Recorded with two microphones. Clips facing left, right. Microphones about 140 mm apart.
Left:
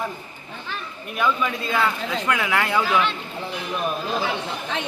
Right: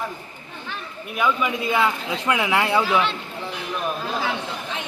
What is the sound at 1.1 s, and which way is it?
Speech, 10° right (ahead or behind).